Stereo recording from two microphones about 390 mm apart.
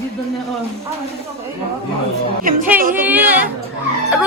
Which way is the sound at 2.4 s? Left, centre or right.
Right.